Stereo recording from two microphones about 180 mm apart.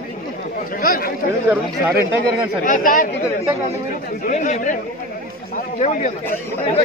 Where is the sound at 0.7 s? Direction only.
55° left (ahead or behind).